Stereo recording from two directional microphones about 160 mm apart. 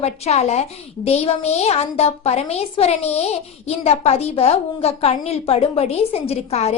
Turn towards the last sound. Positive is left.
turn(degrees=40)  # may be behind; listen again after turning